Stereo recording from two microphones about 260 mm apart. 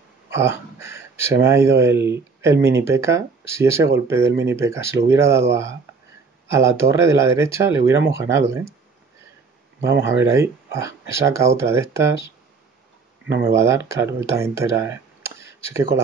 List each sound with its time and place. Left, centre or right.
0.3 s speech: centre
6.5 s speech: centre
9.8 s speech: right
10.2 s speech: centre
13.5 s speech: centre